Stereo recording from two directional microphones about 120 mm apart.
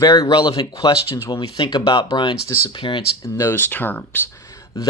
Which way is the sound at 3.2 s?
25° left (ahead or behind).